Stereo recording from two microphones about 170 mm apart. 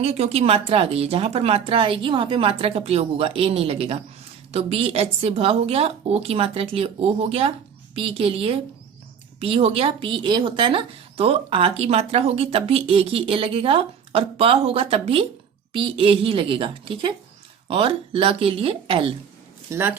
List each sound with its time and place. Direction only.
0.0 s speech: 35° right (ahead or behind)
19.7 s speech: 10° right (ahead or behind)